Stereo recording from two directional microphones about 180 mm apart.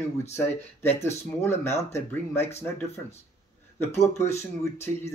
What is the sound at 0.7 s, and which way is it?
Speech, 15° left (ahead or behind).